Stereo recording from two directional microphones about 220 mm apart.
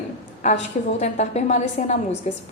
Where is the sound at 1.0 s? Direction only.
30° left (ahead or behind).